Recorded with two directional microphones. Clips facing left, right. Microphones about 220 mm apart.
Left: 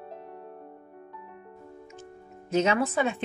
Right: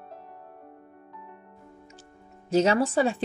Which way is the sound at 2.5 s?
35° right (ahead or behind).